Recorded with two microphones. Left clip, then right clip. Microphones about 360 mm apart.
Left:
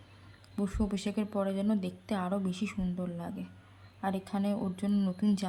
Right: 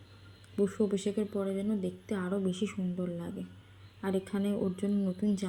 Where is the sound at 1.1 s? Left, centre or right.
Left.